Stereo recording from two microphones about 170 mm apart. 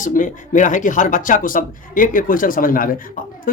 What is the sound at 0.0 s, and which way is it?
Speech, 50° left (ahead or behind).